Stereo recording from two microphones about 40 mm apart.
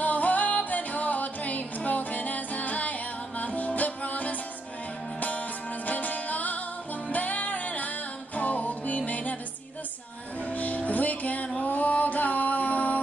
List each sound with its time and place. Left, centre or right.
0.0 s music: left
5.9 s music: left
10.4 s music: left